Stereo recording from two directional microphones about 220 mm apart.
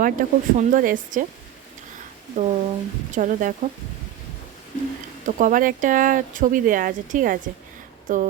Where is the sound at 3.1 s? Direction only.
35° right (ahead or behind).